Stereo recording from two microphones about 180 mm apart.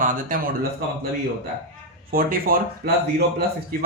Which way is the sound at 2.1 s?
55° right (ahead or behind).